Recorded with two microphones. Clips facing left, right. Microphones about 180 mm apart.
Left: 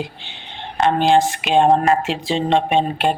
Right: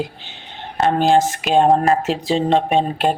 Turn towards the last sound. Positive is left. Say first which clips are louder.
# even
turn(degrees=-40)  # may be behind; listen again after turning